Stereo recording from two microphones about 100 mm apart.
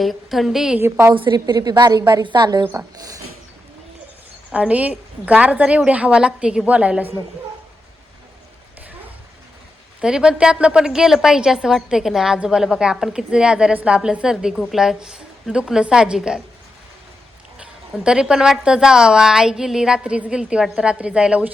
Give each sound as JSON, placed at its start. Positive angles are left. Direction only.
{"t": 0.0, "sound": "a woman's voice", "side_deg": 0}
{"t": 0.8, "sound": "a woman's voice", "side_deg": -25}
{"t": 1.1, "sound": "a woman's voice", "side_deg": -55}
{"t": 4.5, "sound": "a woman's voice", "side_deg": -15}
{"t": 10.0, "sound": "a woman's voice", "side_deg": -10}
{"t": 17.9, "sound": "a woman's voice", "side_deg": -5}